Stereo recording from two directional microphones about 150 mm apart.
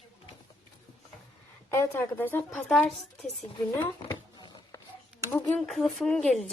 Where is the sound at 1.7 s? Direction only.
15° left (ahead or behind).